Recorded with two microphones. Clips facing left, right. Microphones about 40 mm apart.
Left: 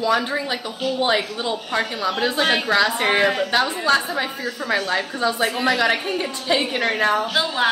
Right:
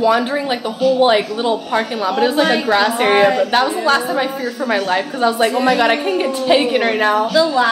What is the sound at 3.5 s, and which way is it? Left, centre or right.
A woman's voice, right.